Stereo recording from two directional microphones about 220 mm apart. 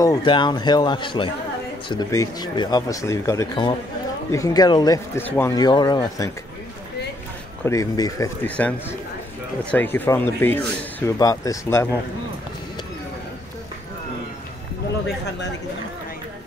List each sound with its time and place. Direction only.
0.0 s speech: 20° left (ahead or behind)
7.6 s speech: 15° left (ahead or behind)